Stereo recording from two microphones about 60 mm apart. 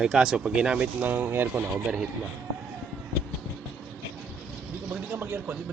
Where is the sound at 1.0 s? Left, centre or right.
Right.